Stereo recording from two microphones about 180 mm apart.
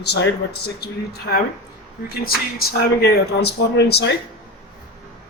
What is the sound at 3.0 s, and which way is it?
Speech, 65° left (ahead or behind).